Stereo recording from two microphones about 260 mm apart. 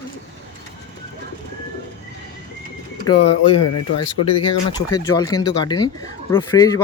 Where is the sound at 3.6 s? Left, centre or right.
Left.